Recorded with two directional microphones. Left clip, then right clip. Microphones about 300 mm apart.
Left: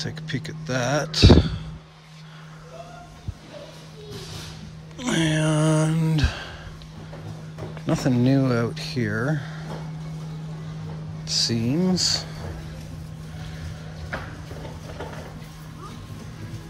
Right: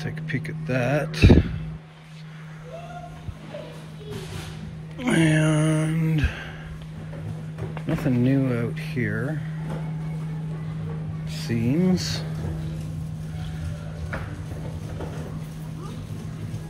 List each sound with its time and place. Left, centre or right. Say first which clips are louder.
0.0 s speech: even; centre
5.0 s a sound: right 2 dB; centre
7.8 s speech: left 2 dB; centre
11.2 s speech: left 5 dB; centre